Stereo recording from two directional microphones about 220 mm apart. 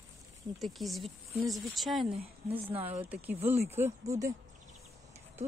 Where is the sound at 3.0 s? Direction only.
10° right (ahead or behind).